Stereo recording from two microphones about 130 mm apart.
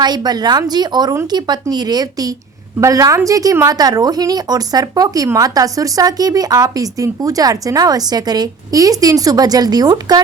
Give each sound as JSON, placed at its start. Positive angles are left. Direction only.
{"t": 0.0, "sound": "a woman's voice", "side_deg": -30}